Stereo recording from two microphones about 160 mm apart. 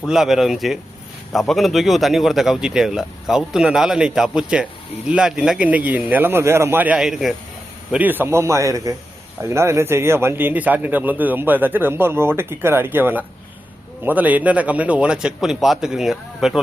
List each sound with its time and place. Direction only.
0.0 s a man's voice: centre (ahead or behind)